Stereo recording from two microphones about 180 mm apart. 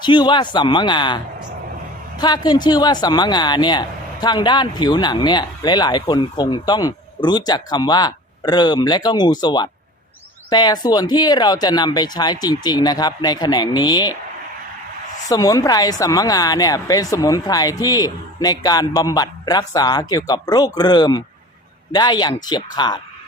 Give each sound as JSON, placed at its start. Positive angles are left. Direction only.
{"t": 0.0, "sound": "speech", "side_deg": 25}
{"t": 15.3, "sound": "speech", "side_deg": 20}